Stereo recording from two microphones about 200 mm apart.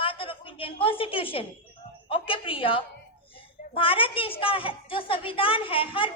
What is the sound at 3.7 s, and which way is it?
A woman's voice, 25° left (ahead or behind).